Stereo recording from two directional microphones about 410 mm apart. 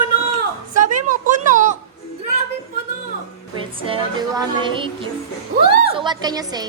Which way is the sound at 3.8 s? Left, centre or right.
Centre.